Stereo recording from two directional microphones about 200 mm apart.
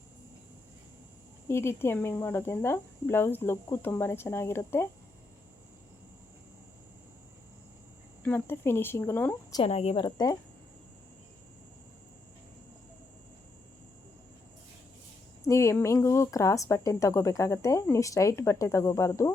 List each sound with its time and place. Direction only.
1.5 s speech: 10° left (ahead or behind)
8.2 s speech: 10° left (ahead or behind)
9.6 s a woman's voice: 30° left (ahead or behind)
15.4 s speech: 15° left (ahead or behind)